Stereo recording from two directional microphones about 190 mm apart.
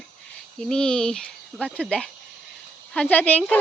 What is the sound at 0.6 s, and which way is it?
Speech, 5° left (ahead or behind).